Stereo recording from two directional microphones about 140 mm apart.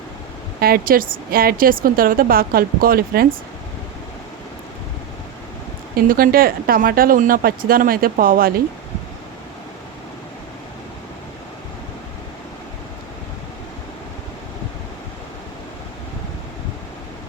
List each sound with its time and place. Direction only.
0.6 s a woman's voice: 90° right
6.1 s a woman's voice: 90° right